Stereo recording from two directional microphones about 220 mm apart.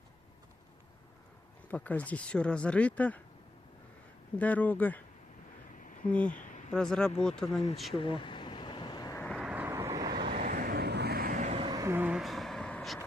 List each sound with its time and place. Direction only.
1.6 s speech: 5° left (ahead or behind)
4.4 s speech: 5° left (ahead or behind)
6.2 s a sound: 35° left (ahead or behind)
6.7 s speech: 5° left (ahead or behind)
7.9 s vehicle: 25° left (ahead or behind)
9.2 s vehicle: centre (ahead or behind); by 10.4 s 20° right (ahead or behind)
10.4 s vehicle: 40° right (ahead or behind)
11.7 s vehicle: 15° right (ahead or behind); by 13.1 s 5° left (ahead or behind)